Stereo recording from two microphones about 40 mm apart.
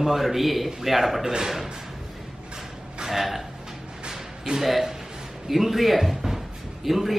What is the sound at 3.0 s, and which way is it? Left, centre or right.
Speech, centre.